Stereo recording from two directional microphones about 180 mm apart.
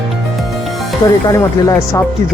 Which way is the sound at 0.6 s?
Centre (ahead or behind).